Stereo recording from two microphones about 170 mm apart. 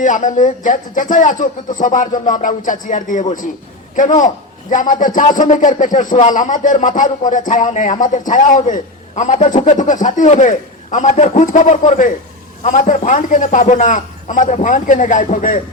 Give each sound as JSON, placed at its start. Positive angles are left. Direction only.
{"t": 0.0, "sound": "speech", "side_deg": 50}